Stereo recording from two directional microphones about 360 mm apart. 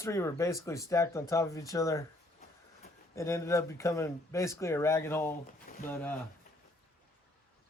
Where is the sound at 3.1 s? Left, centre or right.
Centre.